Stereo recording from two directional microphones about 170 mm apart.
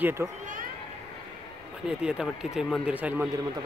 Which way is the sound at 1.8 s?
5° right (ahead or behind).